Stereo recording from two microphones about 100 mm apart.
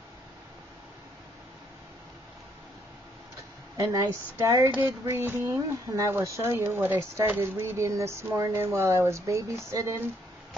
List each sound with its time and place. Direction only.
3.7 s speech: 30° right (ahead or behind)
5.0 s speech: 20° right (ahead or behind)